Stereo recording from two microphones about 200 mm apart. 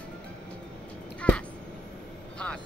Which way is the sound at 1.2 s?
5° left (ahead or behind).